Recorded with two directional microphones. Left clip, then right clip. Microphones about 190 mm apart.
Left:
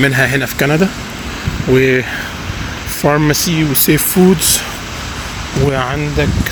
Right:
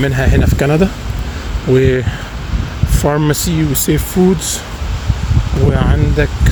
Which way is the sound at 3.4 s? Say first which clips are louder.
Left 2 dB; 25° right (ahead or behind).